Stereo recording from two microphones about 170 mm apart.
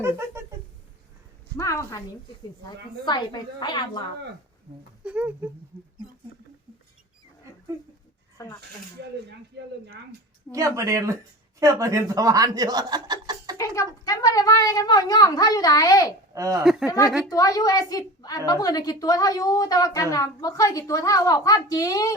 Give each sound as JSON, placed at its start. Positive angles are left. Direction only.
{"t": 0.0, "sound": "speech", "side_deg": -15}
{"t": 1.5, "sound": "a woman's voice", "side_deg": 15}
{"t": 5.0, "sound": "speech", "side_deg": -5}
{"t": 8.4, "sound": "a woman's voice", "side_deg": 20}
{"t": 10.5, "sound": "speech", "side_deg": -20}
{"t": 13.6, "sound": "a woman's voice", "side_deg": 20}
{"t": 16.3, "sound": "speech", "side_deg": -20}
{"t": 16.6, "sound": "speech", "side_deg": -5}
{"t": 17.2, "sound": "a woman's voice", "side_deg": 20}